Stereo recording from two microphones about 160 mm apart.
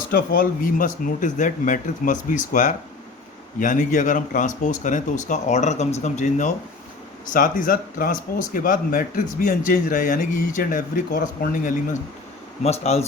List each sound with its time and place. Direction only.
0.1 s speech: 65° left (ahead or behind); by 6.5 s 50° left (ahead or behind)
7.3 s speech: 60° left (ahead or behind)
12.6 s speech: 40° left (ahead or behind)